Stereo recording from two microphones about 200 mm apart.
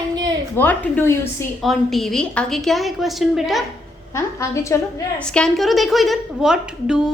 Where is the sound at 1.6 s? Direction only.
Centre (ahead or behind).